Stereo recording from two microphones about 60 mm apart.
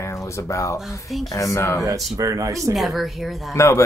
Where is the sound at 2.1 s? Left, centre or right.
Right.